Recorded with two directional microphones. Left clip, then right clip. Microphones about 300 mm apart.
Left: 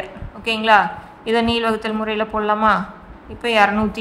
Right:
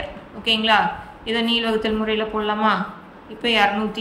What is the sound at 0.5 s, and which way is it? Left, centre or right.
A woman's voice, centre.